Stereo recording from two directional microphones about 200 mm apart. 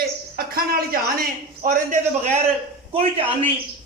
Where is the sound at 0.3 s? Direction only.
50° right (ahead or behind).